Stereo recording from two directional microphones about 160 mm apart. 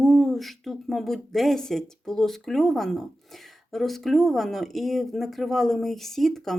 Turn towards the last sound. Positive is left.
turn(degrees=0)  # may be behind; listen again after turning